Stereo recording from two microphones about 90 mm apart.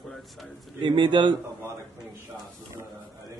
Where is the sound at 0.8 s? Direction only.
60° right (ahead or behind).